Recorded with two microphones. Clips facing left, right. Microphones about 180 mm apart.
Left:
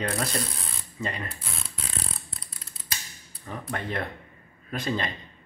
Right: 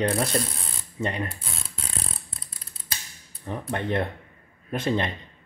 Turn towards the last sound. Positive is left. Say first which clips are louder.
# right 4 dB
turn(degrees=-20)  # may be behind; listen again after turning